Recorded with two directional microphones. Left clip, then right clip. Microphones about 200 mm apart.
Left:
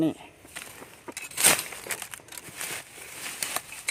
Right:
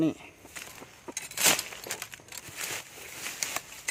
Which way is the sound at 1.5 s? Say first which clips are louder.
Left 2 dB; 50° left (ahead or behind).